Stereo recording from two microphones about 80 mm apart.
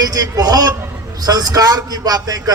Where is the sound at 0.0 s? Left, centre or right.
Right.